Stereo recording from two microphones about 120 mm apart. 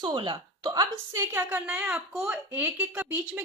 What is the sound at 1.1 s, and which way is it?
Speech, 15° right (ahead or behind).